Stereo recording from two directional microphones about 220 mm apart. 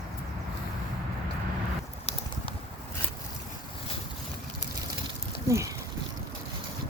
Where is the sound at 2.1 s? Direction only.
25° left (ahead or behind).